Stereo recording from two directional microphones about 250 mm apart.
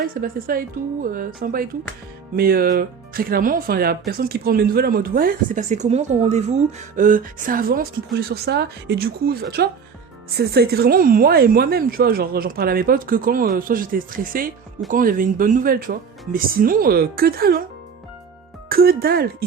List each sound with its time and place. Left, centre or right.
0.1 s speech: right
18.7 s speech: right